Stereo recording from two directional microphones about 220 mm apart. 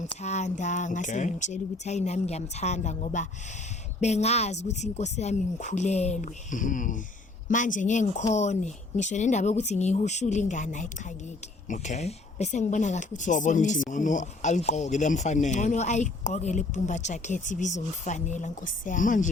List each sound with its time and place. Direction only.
0.2 s speech: 30° left (ahead or behind)